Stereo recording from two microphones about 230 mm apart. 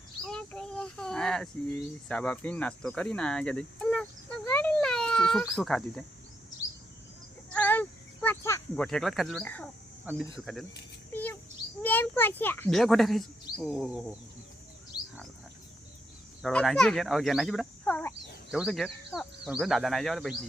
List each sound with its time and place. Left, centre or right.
0.3 s a sound: centre
2.0 s speech: centre
7.5 s a sound: centre
10.1 s speech: centre
11.1 s bird: centre
11.8 s a child's voice: centre
16.4 s speech: centre